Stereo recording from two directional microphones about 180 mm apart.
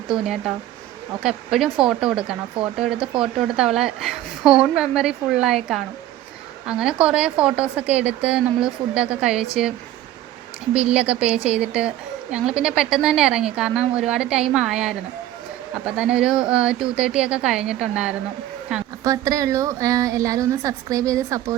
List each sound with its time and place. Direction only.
0.1 s a woman's voice: centre (ahead or behind)
10.8 s a woman's voice: 5° right (ahead or behind)
19.0 s a woman's voice: 20° right (ahead or behind)